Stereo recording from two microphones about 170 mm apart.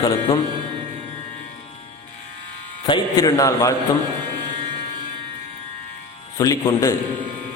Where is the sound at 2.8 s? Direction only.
25° left (ahead or behind).